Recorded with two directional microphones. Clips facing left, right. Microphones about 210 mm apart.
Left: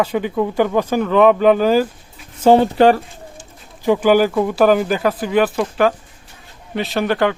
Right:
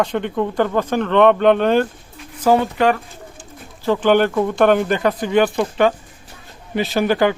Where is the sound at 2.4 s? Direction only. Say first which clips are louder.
Left 4 dB; 30° left (ahead or behind).